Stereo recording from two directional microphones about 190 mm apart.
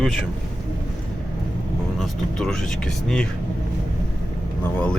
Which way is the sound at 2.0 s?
Centre (ahead or behind).